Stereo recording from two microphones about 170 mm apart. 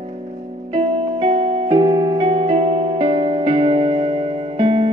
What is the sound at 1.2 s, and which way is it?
Music, 30° right (ahead or behind).